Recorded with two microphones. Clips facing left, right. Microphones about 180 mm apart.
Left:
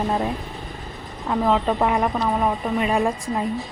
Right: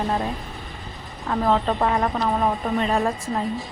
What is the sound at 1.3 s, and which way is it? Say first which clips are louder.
Speech: left 1 dB; 10° left (ahead or behind).